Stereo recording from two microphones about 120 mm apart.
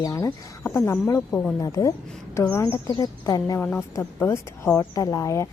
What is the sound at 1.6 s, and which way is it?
Speech, 30° left (ahead or behind).